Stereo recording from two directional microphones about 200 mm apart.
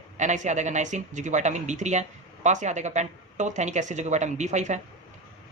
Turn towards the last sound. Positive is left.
turn(degrees=-35)  # may be behind; listen again after turning